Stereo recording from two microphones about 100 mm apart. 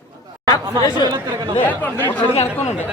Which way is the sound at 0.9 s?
45° left (ahead or behind).